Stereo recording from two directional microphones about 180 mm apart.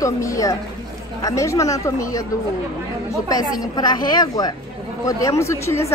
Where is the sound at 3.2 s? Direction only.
20° left (ahead or behind).